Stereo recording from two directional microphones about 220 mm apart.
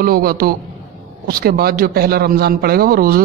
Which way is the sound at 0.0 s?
40° right (ahead or behind).